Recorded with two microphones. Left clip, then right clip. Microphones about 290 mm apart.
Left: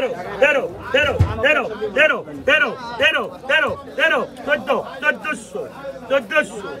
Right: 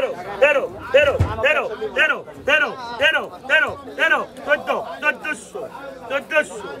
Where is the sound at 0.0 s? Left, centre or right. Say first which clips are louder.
Even; centre.